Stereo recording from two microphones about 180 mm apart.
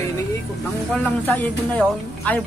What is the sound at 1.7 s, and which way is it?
Speech, 10° left (ahead or behind).